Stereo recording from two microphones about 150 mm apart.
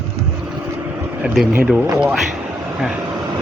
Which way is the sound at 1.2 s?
5° right (ahead or behind).